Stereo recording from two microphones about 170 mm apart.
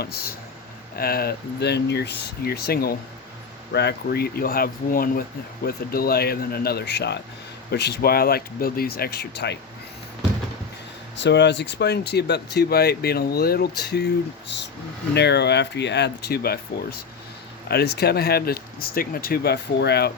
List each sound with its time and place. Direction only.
0.0 s speech: 65° left (ahead or behind)
3.7 s speech: 80° left
11.2 s speech: 90° left; by 20.1 s 70° left (ahead or behind)